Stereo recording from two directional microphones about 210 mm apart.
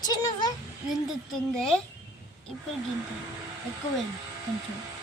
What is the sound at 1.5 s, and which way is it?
Speech, 5° left (ahead or behind).